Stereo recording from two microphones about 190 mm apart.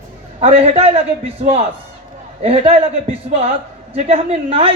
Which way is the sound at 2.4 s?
30° right (ahead or behind).